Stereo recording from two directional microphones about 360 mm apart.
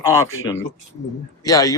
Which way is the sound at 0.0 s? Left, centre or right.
Centre.